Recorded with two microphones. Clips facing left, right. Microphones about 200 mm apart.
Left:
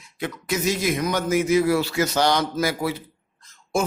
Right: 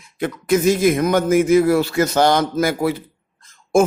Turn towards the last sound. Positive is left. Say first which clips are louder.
# right 9 dB
turn(degrees=-50)  # may be behind; listen again after turning